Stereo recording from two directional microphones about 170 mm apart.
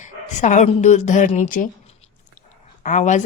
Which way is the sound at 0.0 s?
45° left (ahead or behind).